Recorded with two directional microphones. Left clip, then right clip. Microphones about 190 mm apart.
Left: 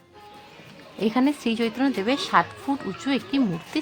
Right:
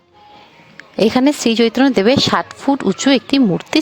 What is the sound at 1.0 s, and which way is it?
Speech, 55° right (ahead or behind).